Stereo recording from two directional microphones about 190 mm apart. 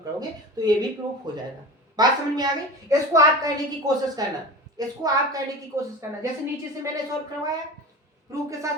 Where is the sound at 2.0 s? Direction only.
20° right (ahead or behind).